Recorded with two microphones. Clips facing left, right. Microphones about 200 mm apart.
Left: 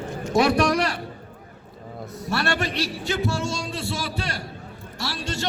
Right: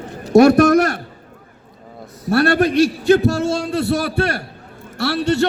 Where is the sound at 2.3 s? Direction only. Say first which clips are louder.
Right 11 dB; 55° right (ahead or behind).